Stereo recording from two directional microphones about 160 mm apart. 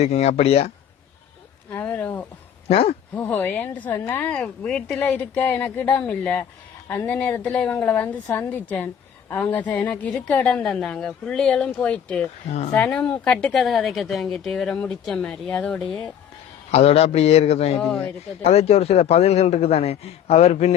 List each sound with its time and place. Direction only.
0.0 s a man's voice: 40° left (ahead or behind)
1.7 s speech: 10° left (ahead or behind)
2.6 s speech: 35° left (ahead or behind)
3.2 s speech: 10° left (ahead or behind)
16.7 s a man's voice: 40° left (ahead or behind)
17.8 s speech: 5° left (ahead or behind)
18.4 s a man's voice: 40° left (ahead or behind)